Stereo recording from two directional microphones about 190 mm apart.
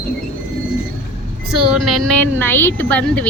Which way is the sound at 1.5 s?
Centre (ahead or behind).